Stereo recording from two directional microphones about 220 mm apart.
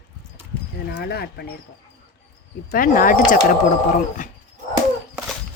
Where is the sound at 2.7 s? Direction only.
40° left (ahead or behind).